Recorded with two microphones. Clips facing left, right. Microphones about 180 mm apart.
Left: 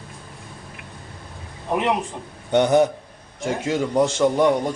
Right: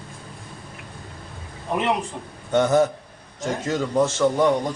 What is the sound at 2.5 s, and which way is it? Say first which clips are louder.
A man's voice: left 2 dB; 15° left (ahead or behind).